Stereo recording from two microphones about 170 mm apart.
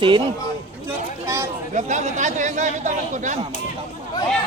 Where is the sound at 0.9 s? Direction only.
15° right (ahead or behind).